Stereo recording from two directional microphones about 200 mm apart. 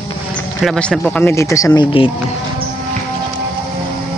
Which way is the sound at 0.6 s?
5° left (ahead or behind).